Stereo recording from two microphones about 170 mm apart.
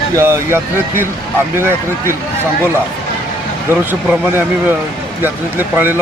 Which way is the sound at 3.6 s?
10° right (ahead or behind).